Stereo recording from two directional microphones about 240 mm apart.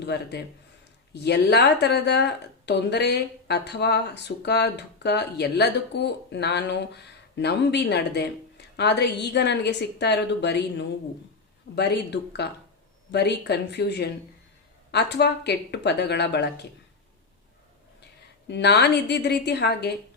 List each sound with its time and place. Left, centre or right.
0.0 s speech: left
18.4 s speech: left